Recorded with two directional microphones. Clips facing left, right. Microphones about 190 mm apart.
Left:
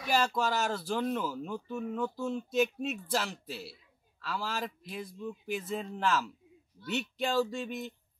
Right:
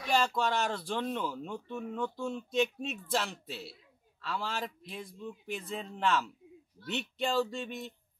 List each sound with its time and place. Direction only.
0.0 s speech: centre (ahead or behind)